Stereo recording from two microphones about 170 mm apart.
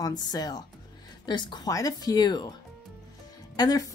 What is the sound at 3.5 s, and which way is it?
Speech, 20° left (ahead or behind).